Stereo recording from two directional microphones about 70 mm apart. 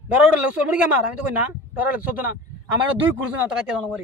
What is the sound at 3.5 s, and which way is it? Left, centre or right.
Speech, centre.